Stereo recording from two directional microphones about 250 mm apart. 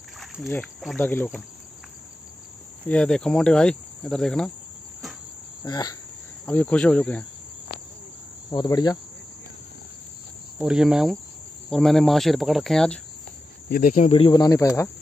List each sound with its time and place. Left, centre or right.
0.2 s speech: centre
2.9 s cricket: centre
5.6 s cricket: centre
8.5 s cricket: centre
10.6 s cricket: centre
13.7 s speech: left; by 14.9 s centre